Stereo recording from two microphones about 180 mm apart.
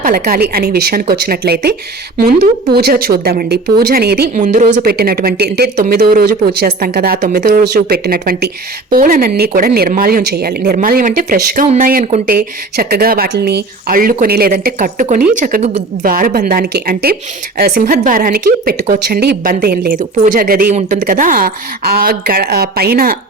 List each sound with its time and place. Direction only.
0.0 s speech: 55° right (ahead or behind)
4.4 s speech: 45° right (ahead or behind); by 10.8 s 60° right (ahead or behind)
10.8 s speech: 50° right (ahead or behind)